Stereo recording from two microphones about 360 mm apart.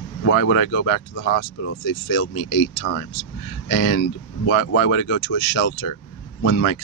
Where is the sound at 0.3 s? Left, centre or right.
Left.